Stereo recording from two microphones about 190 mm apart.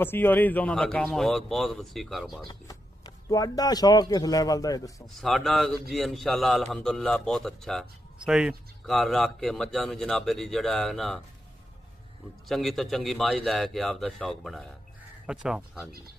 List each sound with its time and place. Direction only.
0.0 s speech: 10° left (ahead or behind)
3.3 s a man's voice: 20° left (ahead or behind)
5.0 s speech: centre (ahead or behind)
12.4 s speech: centre (ahead or behind)